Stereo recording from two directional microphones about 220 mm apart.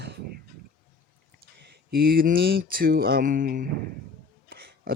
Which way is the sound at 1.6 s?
45° right (ahead or behind).